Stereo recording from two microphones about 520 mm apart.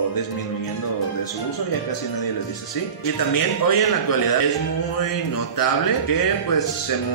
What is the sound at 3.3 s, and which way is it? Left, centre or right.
A man's voice, left.